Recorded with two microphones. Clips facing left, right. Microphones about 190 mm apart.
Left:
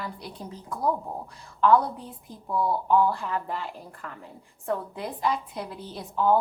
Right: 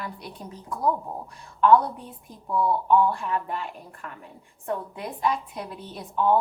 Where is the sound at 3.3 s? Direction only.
30° left (ahead or behind).